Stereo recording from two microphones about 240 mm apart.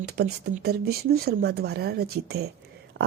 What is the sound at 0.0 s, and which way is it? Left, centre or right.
Speech, right.